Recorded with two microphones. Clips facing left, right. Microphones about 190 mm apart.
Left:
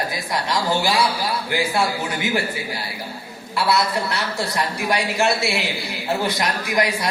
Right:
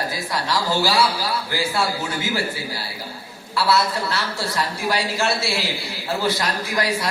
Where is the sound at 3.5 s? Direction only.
20° left (ahead or behind).